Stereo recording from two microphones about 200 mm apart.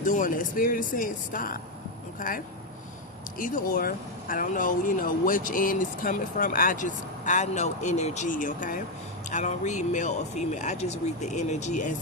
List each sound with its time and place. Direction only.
0.0 s speech: 40° left (ahead or behind)